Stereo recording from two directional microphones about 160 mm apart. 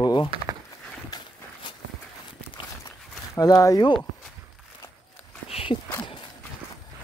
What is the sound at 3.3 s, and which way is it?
Speech, 20° left (ahead or behind).